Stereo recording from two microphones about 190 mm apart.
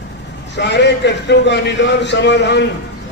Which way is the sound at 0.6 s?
65° left (ahead or behind).